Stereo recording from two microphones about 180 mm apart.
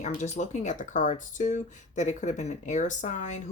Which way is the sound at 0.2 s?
40° left (ahead or behind).